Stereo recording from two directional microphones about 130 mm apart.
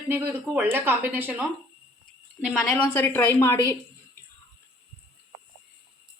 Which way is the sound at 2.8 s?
15° left (ahead or behind).